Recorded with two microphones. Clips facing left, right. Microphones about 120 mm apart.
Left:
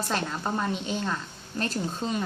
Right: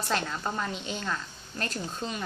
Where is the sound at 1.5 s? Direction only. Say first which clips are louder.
Left 4 dB; 35° left (ahead or behind).